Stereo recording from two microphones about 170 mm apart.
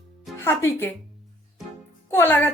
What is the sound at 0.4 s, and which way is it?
Speech, 15° left (ahead or behind).